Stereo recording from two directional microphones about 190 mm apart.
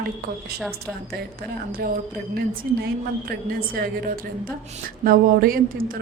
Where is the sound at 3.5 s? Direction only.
50° right (ahead or behind).